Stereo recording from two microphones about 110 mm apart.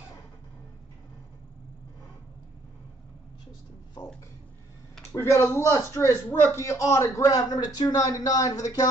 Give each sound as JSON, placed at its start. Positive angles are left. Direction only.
{"t": 5.1, "sound": "a man's voice", "side_deg": 25}